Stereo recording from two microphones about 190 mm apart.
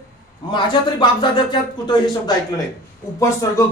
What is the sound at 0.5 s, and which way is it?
Speech, 25° left (ahead or behind).